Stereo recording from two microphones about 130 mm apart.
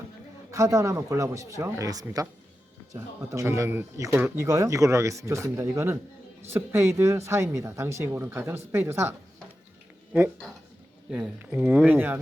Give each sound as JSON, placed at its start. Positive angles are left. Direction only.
{"t": 0.5, "sound": "speech", "side_deg": -25}
{"t": 10.1, "sound": "speech", "side_deg": -5}